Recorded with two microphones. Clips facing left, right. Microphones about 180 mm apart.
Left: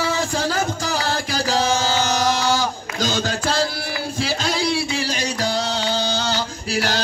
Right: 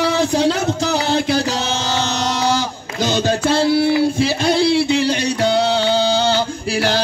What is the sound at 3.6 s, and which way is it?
Speech, 60° right (ahead or behind).